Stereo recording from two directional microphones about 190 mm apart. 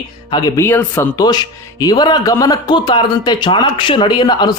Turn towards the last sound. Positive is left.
turn(degrees=25)  # may be behind; listen again after turning